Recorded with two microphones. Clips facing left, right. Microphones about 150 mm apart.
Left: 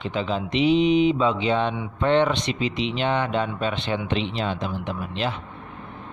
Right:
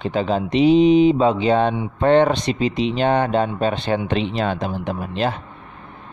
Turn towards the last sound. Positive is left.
turn(degrees=-40)  # may be behind; listen again after turning